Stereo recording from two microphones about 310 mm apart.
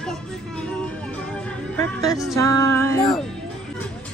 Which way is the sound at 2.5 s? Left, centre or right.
Right.